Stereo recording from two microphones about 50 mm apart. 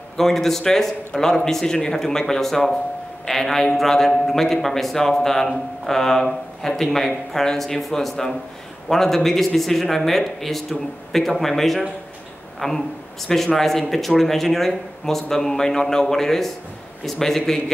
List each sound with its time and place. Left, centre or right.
0.2 s a man's voice: centre